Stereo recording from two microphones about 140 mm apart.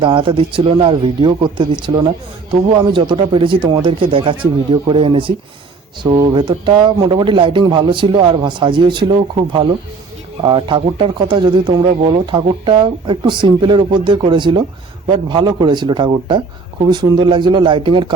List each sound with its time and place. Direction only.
0.0 s speech: 35° right (ahead or behind)